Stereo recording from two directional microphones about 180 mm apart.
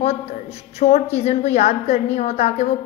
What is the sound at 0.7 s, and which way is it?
A woman's voice, 40° left (ahead or behind).